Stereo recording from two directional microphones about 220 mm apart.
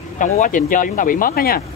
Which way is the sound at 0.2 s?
35° left (ahead or behind).